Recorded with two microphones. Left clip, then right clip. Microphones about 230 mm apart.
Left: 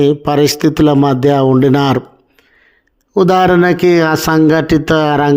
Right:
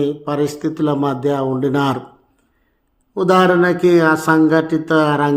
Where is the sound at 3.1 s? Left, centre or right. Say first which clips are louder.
Left 4 dB; left.